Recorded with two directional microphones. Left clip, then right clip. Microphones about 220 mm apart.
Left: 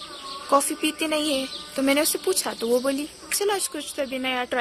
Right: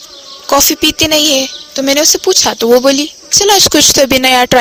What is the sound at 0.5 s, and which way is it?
Speech, 40° right (ahead or behind).